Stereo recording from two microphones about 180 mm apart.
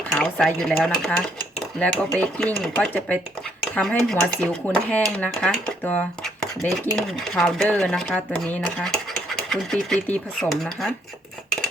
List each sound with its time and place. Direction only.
0.1 s speech: 5° left (ahead or behind)